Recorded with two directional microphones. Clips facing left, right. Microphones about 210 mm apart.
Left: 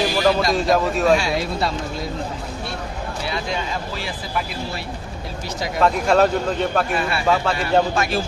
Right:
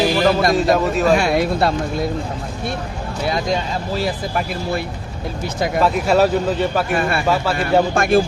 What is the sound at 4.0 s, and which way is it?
Speech, 50° right (ahead or behind).